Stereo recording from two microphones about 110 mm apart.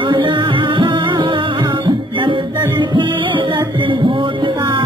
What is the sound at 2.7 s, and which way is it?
Music, 45° right (ahead or behind).